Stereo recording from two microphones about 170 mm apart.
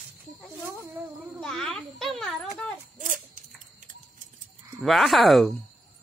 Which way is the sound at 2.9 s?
50° right (ahead or behind).